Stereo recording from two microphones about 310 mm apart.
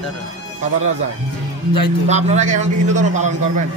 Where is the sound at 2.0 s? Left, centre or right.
Right.